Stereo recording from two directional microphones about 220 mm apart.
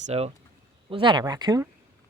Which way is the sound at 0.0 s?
30° right (ahead or behind).